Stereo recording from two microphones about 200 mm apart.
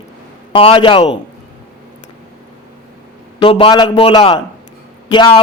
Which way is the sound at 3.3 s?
25° left (ahead or behind).